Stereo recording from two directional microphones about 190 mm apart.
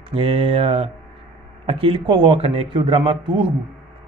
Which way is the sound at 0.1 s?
30° right (ahead or behind).